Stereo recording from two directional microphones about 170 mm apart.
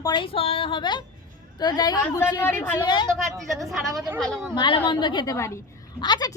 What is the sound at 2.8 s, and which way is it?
Speech, 25° left (ahead or behind).